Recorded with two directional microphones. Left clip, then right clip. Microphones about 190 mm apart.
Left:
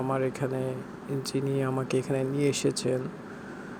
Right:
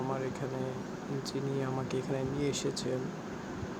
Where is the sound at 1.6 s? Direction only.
35° left (ahead or behind).